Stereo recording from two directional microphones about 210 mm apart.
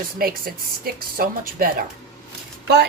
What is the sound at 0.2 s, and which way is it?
A woman's voice, 45° right (ahead or behind).